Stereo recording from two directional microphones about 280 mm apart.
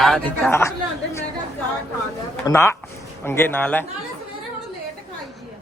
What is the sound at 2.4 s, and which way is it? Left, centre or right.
Speech, centre.